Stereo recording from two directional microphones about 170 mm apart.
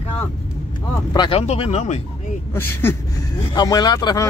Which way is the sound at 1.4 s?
40° left (ahead or behind).